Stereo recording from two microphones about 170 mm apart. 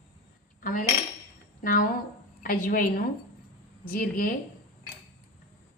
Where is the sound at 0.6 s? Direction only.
55° left (ahead or behind).